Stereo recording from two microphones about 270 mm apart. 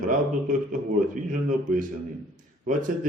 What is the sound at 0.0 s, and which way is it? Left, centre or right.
A man's voice, right.